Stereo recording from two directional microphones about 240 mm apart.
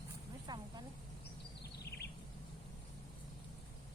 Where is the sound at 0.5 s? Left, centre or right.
Centre.